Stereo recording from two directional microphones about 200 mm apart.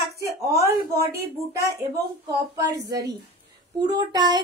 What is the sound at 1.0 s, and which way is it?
Speech, 15° right (ahead or behind).